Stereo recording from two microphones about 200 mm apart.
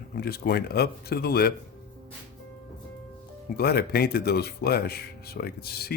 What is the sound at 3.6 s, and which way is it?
Speech, 50° left (ahead or behind).